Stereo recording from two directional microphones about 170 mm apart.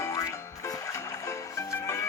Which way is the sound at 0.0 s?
15° left (ahead or behind).